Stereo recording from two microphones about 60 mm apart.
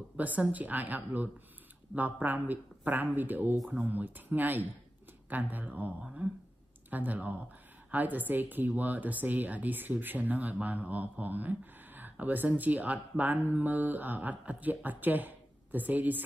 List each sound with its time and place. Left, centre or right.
0.2 s speech: right